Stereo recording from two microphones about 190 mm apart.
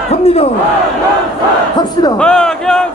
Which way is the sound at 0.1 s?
35° left (ahead or behind).